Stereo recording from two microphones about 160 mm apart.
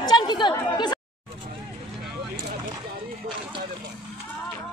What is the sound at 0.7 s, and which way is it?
Speech, 25° left (ahead or behind).